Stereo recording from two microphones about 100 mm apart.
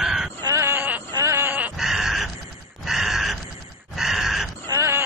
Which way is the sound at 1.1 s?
25° right (ahead or behind).